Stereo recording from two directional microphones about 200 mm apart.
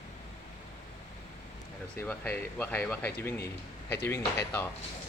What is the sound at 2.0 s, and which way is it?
Speech, 10° left (ahead or behind).